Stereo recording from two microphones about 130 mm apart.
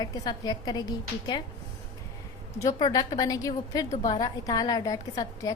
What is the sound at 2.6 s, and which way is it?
A woman's voice, 30° left (ahead or behind).